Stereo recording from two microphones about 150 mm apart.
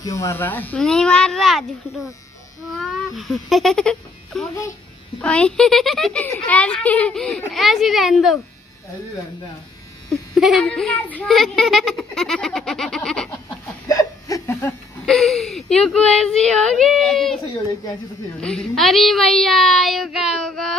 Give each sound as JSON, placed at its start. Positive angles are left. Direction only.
{"t": 0.0, "sound": "speech", "side_deg": 20}
{"t": 10.0, "sound": "speech", "side_deg": 0}
{"t": 13.3, "sound": "a sound", "side_deg": 20}
{"t": 15.0, "sound": "speech", "side_deg": 0}
{"t": 18.4, "sound": "speech", "side_deg": 5}